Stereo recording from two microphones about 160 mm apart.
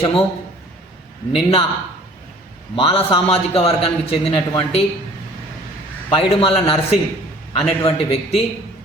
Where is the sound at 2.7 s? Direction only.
35° left (ahead or behind).